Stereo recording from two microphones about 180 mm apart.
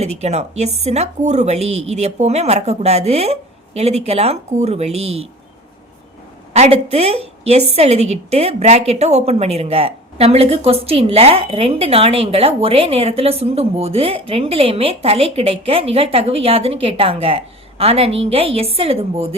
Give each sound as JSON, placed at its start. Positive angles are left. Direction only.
{"t": 0.0, "sound": "a woman's voice", "side_deg": -35}
{"t": 6.5, "sound": "a woman's voice", "side_deg": -35}